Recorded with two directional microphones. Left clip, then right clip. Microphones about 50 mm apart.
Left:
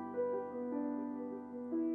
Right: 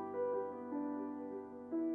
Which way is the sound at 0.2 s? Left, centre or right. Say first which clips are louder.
Left 2 dB; right.